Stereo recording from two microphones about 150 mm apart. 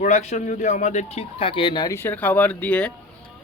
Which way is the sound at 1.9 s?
15° left (ahead or behind).